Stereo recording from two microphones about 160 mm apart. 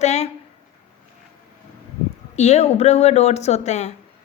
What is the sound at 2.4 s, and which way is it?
Speech, 45° left (ahead or behind).